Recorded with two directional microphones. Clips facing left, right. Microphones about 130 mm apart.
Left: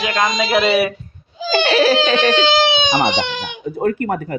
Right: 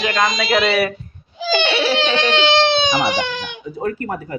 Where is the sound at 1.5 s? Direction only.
40° left (ahead or behind).